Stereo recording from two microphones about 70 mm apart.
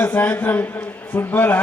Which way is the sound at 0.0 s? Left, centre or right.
Left.